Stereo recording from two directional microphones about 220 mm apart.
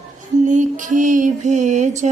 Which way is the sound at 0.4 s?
35° right (ahead or behind).